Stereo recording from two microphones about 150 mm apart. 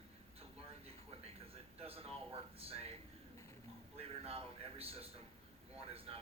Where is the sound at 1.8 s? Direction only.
40° right (ahead or behind).